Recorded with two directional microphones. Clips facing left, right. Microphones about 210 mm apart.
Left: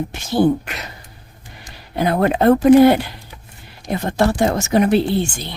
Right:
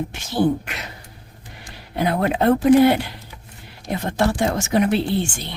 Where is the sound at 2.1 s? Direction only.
45° left (ahead or behind).